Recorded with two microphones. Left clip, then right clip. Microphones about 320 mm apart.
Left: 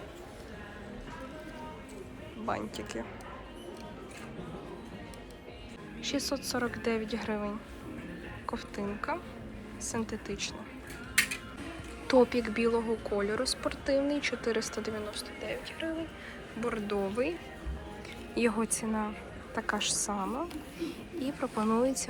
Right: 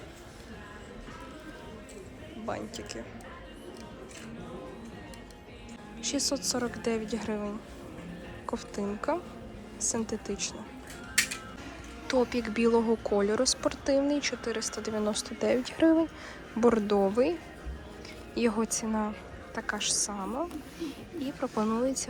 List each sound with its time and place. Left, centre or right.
2.5 s a woman's voice: centre
6.0 s speech: centre
12.0 s speech: centre
15.1 s speech: right
18.3 s a woman's voice: centre